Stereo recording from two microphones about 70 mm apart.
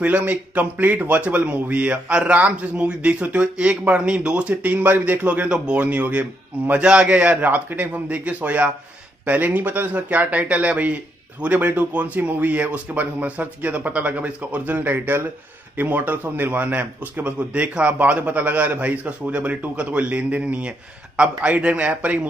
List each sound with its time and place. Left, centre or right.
0.0 s a man's voice: right